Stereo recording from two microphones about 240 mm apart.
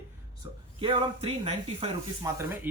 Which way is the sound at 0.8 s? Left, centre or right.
Right.